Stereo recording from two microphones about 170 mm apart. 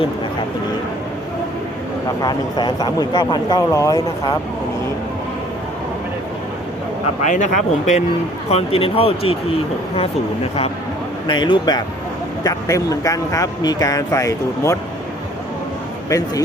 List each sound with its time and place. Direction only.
2.2 s speech: 25° left (ahead or behind)
7.3 s speech: 45° left (ahead or behind)
11.3 s speech: 25° left (ahead or behind)
16.0 s speech: 20° left (ahead or behind)